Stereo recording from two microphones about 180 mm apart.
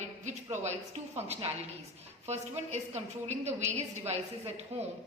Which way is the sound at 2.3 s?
40° right (ahead or behind).